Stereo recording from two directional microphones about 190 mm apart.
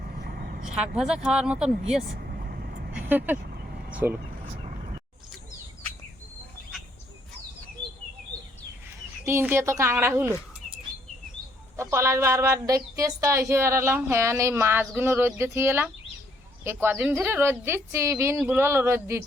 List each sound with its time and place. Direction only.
0.2 s vehicle: 50° right (ahead or behind)
0.7 s a woman's voice: 5° right (ahead or behind)
2.1 s vehicle: 55° right (ahead or behind)
2.9 s vehicle: 10° right (ahead or behind)
3.7 s vehicle: 45° right (ahead or behind)
9.2 s speech: 10° right (ahead or behind)
11.8 s speech: 15° right (ahead or behind)